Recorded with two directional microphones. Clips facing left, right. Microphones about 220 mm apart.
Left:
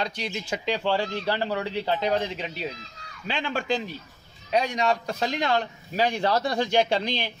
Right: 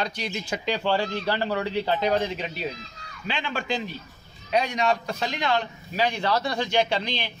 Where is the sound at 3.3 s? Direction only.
45° left (ahead or behind).